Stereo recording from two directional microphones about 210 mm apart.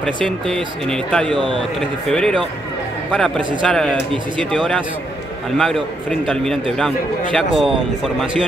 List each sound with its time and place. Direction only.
0.0 s speech: 5° left (ahead or behind)